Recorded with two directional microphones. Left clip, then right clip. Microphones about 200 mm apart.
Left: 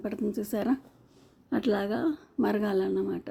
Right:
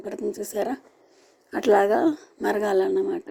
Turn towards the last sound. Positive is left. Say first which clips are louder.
# right 6 dB
turn(degrees=-25)  # may be behind; listen again after turning